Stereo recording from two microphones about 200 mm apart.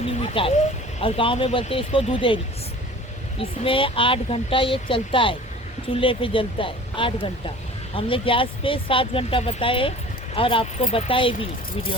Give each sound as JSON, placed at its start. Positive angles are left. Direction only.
{"t": 0.2, "sound": "speech", "side_deg": 30}